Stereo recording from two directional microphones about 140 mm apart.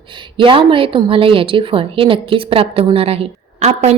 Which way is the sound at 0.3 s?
40° right (ahead or behind).